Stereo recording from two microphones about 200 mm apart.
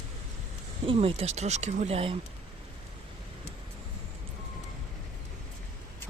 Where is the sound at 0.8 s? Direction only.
30° right (ahead or behind).